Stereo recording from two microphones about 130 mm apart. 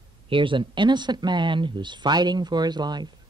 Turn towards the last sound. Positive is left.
turn(degrees=-35)  # may be behind; listen again after turning